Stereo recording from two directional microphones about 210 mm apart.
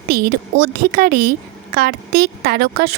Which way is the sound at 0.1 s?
50° right (ahead or behind).